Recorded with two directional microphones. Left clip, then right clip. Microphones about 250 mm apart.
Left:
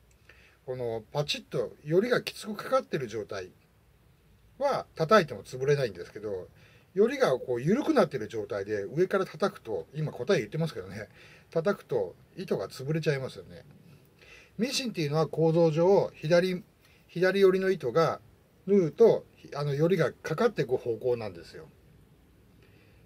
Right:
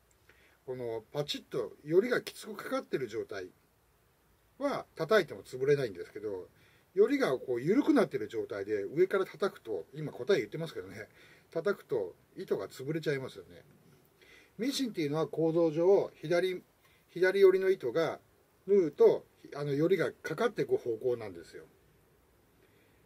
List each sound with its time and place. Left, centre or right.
0.7 s speech: centre
4.6 s speech: centre